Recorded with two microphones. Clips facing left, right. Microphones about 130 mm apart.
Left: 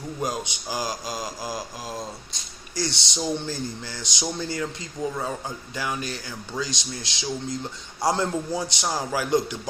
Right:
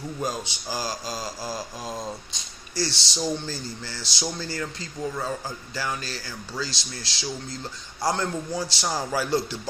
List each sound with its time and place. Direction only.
0.2 s mantra: 15° left (ahead or behind)
2.7 s mantra: 20° left (ahead or behind)
5.7 s speech: 15° left (ahead or behind)
8.9 s mantra: 10° left (ahead or behind)